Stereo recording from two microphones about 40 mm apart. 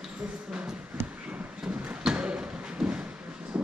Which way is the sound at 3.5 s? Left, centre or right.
Right.